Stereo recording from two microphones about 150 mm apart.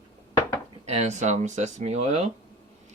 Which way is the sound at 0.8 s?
45° right (ahead or behind).